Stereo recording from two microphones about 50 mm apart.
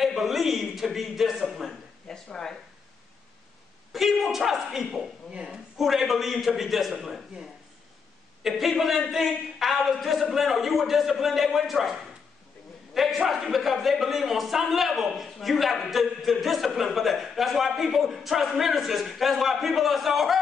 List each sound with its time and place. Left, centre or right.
0.0 s a man's voice: centre
2.0 s speech: centre
3.9 s a man's voice: centre
5.3 s a woman's voice: centre
5.8 s a man's voice: centre
8.5 s a man's voice: centre